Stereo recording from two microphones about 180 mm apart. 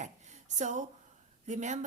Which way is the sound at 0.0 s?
40° right (ahead or behind).